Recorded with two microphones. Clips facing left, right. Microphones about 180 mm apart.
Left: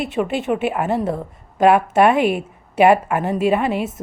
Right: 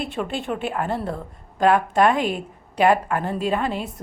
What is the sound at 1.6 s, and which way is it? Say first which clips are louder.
A woman's voice: left 4 dB; 10° left (ahead or behind).